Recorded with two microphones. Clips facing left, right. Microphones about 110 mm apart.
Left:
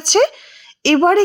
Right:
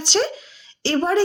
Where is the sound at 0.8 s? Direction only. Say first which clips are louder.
Left 7 dB; 60° left (ahead or behind).